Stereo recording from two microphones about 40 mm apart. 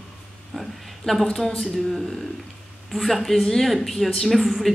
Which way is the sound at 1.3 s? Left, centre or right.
Centre.